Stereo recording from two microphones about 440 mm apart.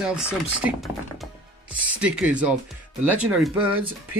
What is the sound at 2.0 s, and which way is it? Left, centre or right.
Speech, centre.